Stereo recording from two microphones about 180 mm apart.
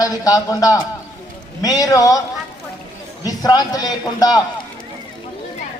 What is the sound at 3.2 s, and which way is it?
A man's voice, 20° left (ahead or behind).